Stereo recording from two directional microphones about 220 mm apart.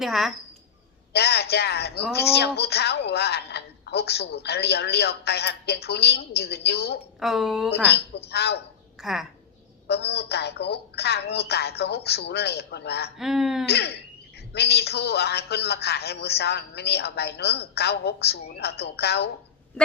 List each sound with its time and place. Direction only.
0.0 s speech: centre (ahead or behind)
1.1 s a woman's voice: 50° left (ahead or behind)
7.2 s speech: centre (ahead or behind)
7.7 s a woman's voice: 50° left (ahead or behind)
9.0 s a woman's voice: centre (ahead or behind)
9.8 s a woman's voice: 50° left (ahead or behind)
13.1 s speech: centre (ahead or behind)
13.7 s a woman's voice: 50° left (ahead or behind)